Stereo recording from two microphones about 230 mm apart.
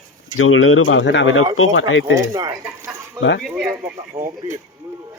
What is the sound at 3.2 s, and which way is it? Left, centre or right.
Speech, left.